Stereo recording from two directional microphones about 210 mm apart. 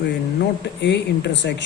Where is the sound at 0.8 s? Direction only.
55° left (ahead or behind).